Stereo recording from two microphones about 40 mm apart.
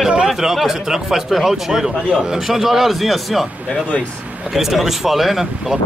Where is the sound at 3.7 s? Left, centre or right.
Left.